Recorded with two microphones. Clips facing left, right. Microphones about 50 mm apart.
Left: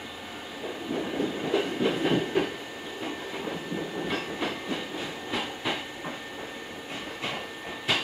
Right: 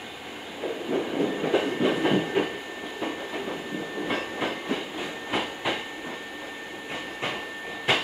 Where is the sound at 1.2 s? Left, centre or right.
Right.